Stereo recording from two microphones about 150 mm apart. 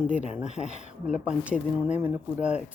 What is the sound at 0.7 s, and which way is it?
Speech, 50° left (ahead or behind).